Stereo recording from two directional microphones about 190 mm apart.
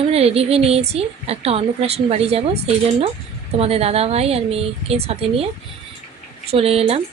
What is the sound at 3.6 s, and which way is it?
A woman's voice, 30° right (ahead or behind).